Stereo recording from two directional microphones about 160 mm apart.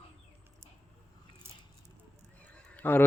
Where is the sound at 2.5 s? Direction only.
10° left (ahead or behind).